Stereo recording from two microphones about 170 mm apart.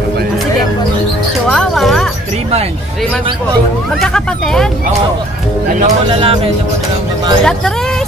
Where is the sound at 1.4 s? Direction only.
5° left (ahead or behind).